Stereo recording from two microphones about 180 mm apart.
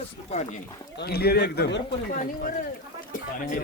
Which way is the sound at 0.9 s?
60° left (ahead or behind).